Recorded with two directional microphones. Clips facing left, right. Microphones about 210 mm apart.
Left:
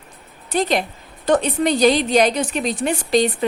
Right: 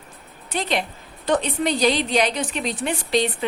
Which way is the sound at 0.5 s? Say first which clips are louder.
Left 5 dB; 45° left (ahead or behind).